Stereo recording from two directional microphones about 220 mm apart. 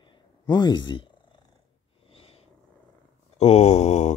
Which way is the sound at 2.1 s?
25° left (ahead or behind).